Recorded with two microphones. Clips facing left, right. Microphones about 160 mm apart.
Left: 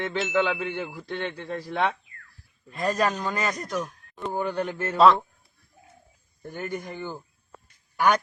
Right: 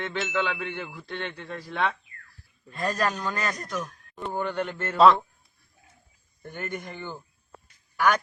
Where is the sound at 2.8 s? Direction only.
5° left (ahead or behind).